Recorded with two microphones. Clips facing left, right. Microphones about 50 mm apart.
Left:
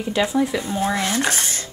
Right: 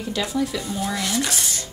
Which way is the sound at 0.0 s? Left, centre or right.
Left.